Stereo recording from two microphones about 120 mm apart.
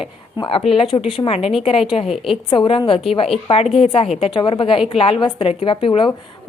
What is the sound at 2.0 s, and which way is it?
Speech, centre (ahead or behind).